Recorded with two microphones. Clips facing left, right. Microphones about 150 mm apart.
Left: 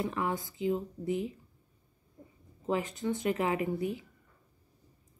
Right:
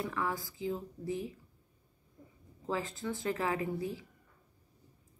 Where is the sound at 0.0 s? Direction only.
20° left (ahead or behind).